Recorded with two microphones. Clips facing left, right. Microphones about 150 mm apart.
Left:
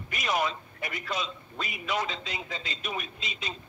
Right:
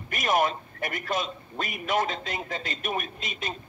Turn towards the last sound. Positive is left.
turn(degrees=-50)  # may be behind; listen again after turning